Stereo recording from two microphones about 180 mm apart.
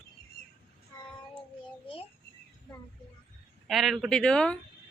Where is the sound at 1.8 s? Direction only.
30° left (ahead or behind).